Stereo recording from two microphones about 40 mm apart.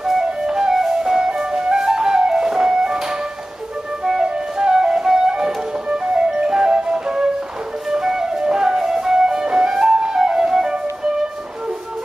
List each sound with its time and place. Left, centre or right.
0.2 s music: centre
4.0 s flute: centre
6.1 s music: right
7.9 s flute: centre